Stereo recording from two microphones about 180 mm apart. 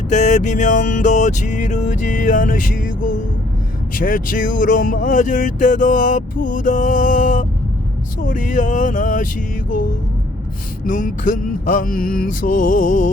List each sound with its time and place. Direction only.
0.1 s speech: 40° left (ahead or behind)